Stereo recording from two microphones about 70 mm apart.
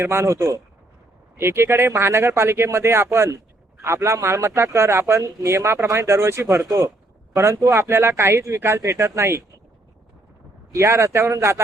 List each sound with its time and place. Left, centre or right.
0.0 s a man's voice: right
7.7 s a man's voice: right
10.7 s speech: right